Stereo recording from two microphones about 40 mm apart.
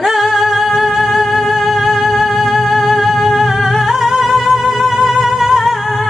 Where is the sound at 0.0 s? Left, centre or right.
Centre.